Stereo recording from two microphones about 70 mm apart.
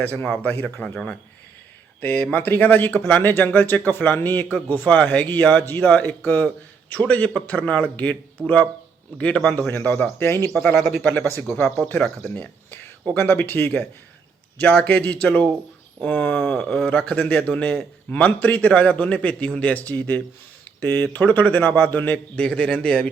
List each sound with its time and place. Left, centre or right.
0.0 s a man's voice: left
2.0 s a man's voice: left
9.1 s a man's voice: centre
10.6 s speech: centre
11.4 s a man's voice: left
16.8 s a man's voice: centre
22.4 s a man's voice: centre